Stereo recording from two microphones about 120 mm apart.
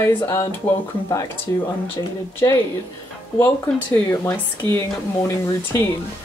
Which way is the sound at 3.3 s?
20° left (ahead or behind).